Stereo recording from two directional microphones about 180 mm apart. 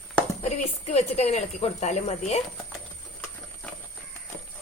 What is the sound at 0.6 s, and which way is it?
A woman's voice, 35° left (ahead or behind).